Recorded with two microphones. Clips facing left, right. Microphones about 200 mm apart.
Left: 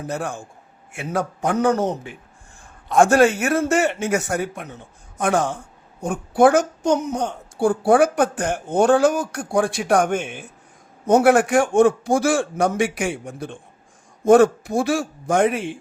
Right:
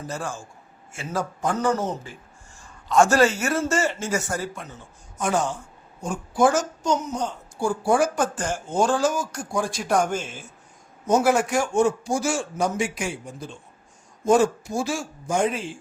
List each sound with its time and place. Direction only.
0.0 s a man's voice: 60° left (ahead or behind)